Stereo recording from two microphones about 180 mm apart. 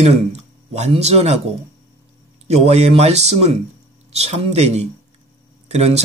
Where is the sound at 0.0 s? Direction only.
40° right (ahead or behind).